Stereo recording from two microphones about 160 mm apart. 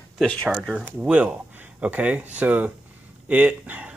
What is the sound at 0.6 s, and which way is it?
Speech, 5° right (ahead or behind).